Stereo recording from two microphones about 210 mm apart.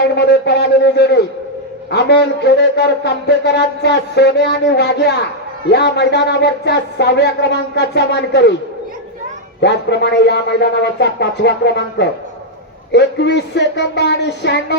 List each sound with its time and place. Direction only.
0.2 s speech: 50° left (ahead or behind)
9.6 s speech: 55° left (ahead or behind)